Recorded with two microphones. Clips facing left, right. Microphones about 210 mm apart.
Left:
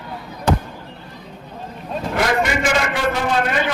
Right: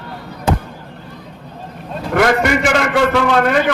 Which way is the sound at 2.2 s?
65° right (ahead or behind).